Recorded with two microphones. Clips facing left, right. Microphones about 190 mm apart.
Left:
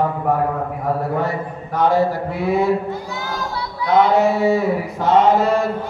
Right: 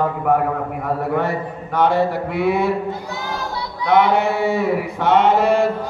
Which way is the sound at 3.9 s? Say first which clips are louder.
Left 1 dB; 65° right (ahead or behind).